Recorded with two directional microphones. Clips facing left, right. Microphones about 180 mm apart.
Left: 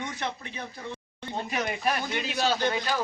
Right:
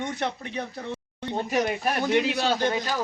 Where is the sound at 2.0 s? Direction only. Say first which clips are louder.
Right 7 dB; 70° right (ahead or behind).